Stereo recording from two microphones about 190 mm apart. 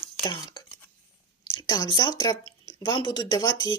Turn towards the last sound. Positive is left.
turn(degrees=20)  # may be behind; listen again after turning